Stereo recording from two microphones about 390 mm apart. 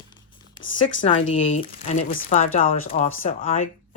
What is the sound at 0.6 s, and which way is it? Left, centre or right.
Speech, left.